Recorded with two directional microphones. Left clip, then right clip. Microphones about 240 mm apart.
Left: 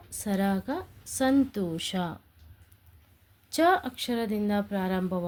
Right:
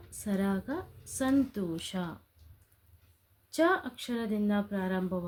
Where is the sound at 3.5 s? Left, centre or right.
Left.